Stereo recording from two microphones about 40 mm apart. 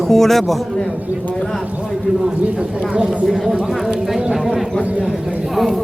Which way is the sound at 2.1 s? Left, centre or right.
Right.